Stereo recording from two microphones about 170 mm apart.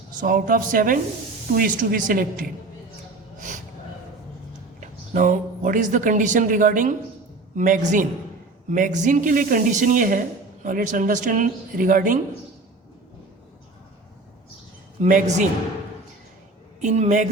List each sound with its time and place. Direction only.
0.2 s speech: 55° right (ahead or behind)
3.3 s a sound: 50° right (ahead or behind)
4.8 s speech: 50° right (ahead or behind)
15.0 s speech: 50° right (ahead or behind)
16.8 s speech: 45° right (ahead or behind)